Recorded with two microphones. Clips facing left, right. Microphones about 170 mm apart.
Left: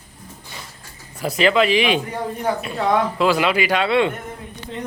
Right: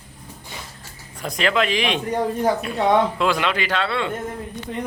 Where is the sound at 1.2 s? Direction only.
5° left (ahead or behind).